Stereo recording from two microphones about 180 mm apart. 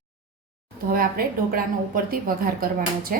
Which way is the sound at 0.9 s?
55° right (ahead or behind).